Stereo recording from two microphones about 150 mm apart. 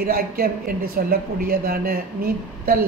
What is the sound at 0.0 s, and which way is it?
Speech, 80° right.